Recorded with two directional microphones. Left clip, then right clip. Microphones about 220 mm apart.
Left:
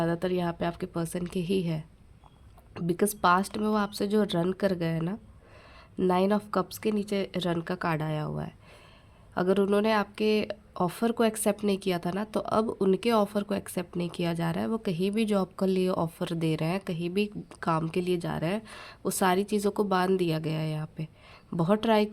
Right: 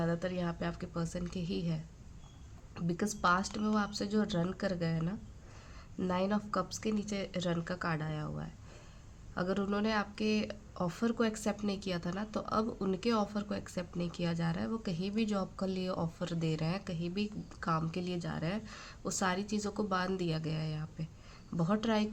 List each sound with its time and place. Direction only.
0.0 s speech: 45° left (ahead or behind)